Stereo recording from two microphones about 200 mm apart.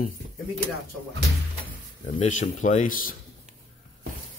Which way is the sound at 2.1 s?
40° left (ahead or behind).